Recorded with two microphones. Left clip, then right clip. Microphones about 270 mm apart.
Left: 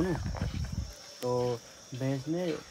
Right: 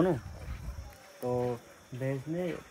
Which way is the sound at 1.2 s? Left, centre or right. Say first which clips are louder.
Left 1 dB; centre.